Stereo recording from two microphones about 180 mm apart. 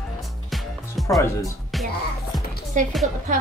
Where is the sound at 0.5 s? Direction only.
Centre (ahead or behind).